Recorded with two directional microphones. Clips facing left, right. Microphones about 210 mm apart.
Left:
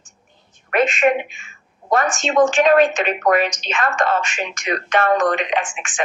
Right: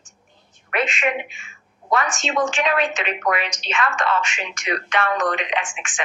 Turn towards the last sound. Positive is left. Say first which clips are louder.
# left 4 dB
turn(degrees=45)  # may be behind; listen again after turning